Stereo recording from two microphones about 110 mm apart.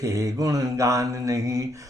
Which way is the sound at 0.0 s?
30° right (ahead or behind).